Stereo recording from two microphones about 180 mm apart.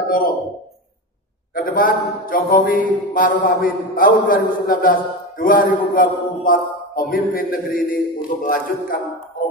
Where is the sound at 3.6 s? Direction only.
50° left (ahead or behind).